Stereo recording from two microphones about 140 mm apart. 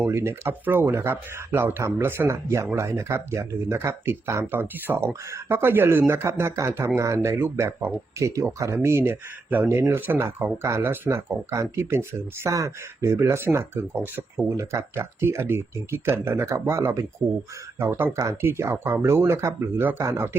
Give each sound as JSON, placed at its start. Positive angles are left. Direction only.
{"t": 0.0, "sound": "speech", "side_deg": -20}